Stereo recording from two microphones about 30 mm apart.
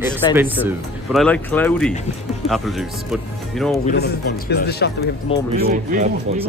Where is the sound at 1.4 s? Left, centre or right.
Left.